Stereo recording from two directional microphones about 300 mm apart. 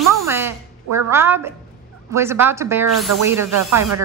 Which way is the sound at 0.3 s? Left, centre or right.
Centre.